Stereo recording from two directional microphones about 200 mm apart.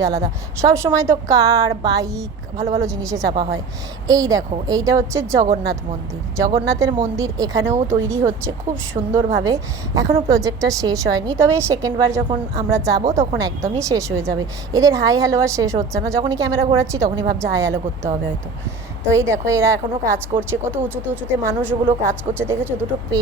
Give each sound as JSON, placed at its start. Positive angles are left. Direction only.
{"t": 0.2, "sound": "a woman's voice", "side_deg": -15}
{"t": 6.7, "sound": "a woman's voice", "side_deg": -15}
{"t": 19.1, "sound": "a woman's voice", "side_deg": -15}